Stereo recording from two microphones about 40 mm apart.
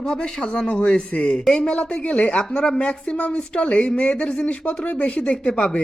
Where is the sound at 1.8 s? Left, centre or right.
Left.